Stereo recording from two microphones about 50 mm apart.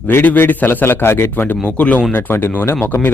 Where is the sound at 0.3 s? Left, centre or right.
Left.